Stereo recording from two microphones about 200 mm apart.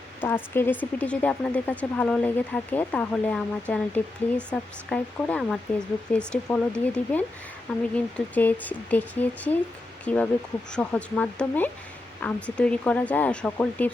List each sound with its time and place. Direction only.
0.2 s speech: 10° left (ahead or behind)